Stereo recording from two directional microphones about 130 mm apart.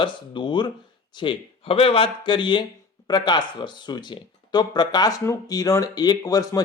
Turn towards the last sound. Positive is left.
turn(degrees=30)  # may be behind; listen again after turning